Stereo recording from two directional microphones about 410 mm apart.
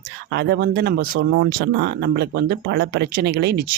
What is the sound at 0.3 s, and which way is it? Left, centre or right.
Speech, right.